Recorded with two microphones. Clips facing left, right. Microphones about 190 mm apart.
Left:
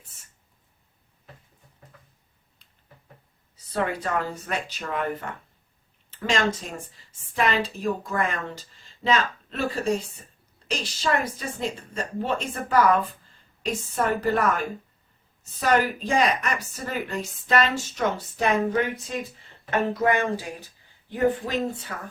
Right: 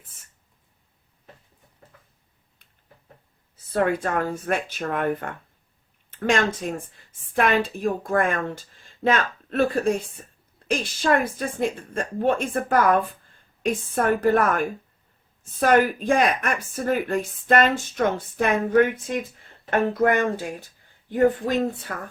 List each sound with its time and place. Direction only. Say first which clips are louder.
3.5 s speech: right 5 dB; 50° right (ahead or behind)